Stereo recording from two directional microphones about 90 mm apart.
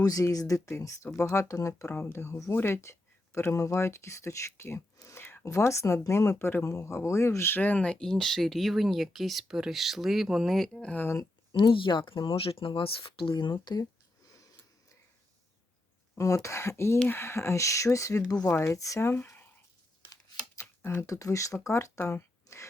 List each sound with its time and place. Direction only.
0.0 s speech: 40° left (ahead or behind)
1.9 s speech: 20° left (ahead or behind); by 10.9 s 5° left (ahead or behind)
10.9 s speech: 25° left (ahead or behind)
11.5 s speech: 65° left (ahead or behind)
16.1 s speech: 35° left (ahead or behind)
20.6 s speech: 30° left (ahead or behind)